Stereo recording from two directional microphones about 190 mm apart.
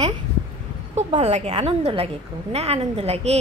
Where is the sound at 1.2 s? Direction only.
35° right (ahead or behind).